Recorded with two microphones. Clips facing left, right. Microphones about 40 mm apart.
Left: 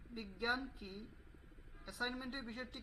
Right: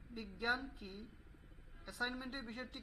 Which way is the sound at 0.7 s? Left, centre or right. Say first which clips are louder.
Even; centre.